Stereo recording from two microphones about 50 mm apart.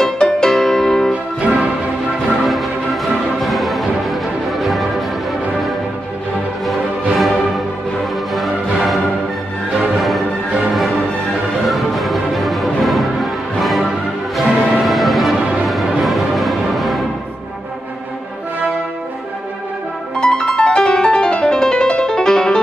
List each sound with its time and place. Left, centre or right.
0.0 s music: centre
1.1 s music: right
2.4 s music: centre
7.2 s music: centre
9.9 s music: centre
11.6 s music: centre
20.2 s music: centre